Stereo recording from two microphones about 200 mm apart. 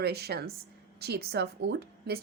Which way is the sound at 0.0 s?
50° right (ahead or behind).